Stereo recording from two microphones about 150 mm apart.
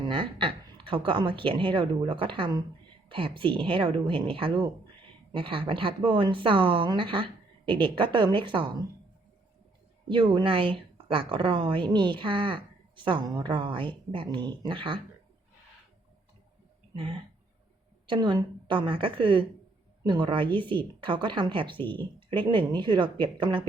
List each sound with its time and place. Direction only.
0.0 s speech: 35° right (ahead or behind)
10.1 s speech: 35° right (ahead or behind)
16.9 s a sound: 35° right (ahead or behind)
18.0 s speech: 30° right (ahead or behind)